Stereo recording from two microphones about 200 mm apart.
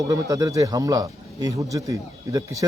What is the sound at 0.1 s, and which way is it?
Speech, 20° right (ahead or behind).